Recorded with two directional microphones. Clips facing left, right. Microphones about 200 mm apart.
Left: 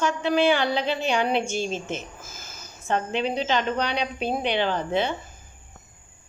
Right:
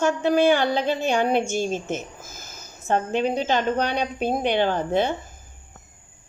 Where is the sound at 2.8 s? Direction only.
45° right (ahead or behind).